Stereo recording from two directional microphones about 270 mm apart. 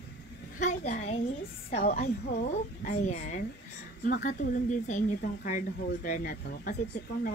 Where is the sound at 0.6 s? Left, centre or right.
Left.